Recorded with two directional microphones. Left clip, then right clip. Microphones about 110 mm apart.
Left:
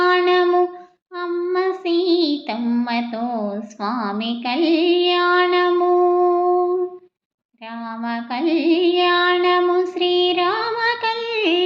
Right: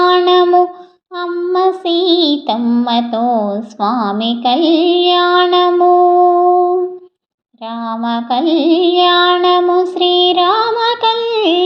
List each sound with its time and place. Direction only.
0.0 s a sound: 45° right (ahead or behind)
1.1 s child singing: 45° right (ahead or behind)
2.6 s music: 40° right (ahead or behind)
7.8 s music: 45° right (ahead or behind)